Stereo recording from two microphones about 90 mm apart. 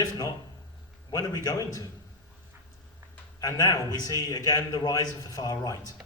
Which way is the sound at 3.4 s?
45° left (ahead or behind).